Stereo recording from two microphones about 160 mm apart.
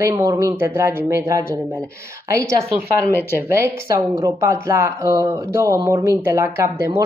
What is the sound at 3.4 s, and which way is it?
Speech, 15° right (ahead or behind).